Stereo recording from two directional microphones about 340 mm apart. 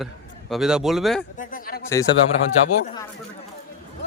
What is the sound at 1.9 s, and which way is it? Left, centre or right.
Speech, centre.